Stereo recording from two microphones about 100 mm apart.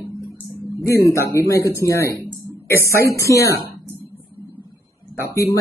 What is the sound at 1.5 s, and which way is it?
A woman's voice, 30° left (ahead or behind).